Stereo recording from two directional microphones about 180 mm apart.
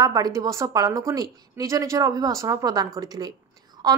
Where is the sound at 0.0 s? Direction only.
20° right (ahead or behind).